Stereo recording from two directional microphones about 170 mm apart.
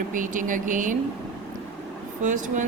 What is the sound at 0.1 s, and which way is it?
Speech, 50° right (ahead or behind).